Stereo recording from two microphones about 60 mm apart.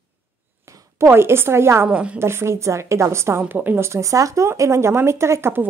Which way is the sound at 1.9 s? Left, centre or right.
Right.